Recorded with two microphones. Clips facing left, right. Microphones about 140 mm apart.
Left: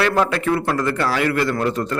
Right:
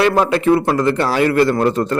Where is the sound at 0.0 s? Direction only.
20° right (ahead or behind).